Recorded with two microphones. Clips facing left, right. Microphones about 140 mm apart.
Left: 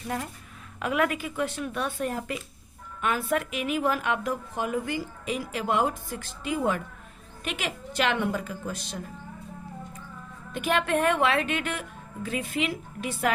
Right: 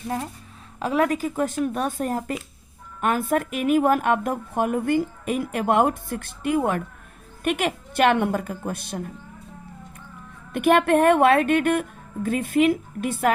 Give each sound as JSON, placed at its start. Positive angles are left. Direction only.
{"t": 0.8, "sound": "speech", "side_deg": -30}
{"t": 10.5, "sound": "speech", "side_deg": -55}